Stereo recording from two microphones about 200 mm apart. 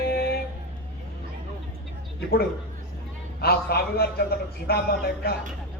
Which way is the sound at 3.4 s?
50° left (ahead or behind).